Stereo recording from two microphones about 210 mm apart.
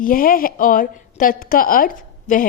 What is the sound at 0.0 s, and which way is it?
A woman's voice, 40° left (ahead or behind).